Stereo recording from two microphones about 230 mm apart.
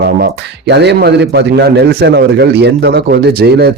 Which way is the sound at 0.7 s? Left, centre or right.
Right.